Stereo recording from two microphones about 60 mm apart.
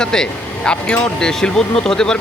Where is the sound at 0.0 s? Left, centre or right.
Centre.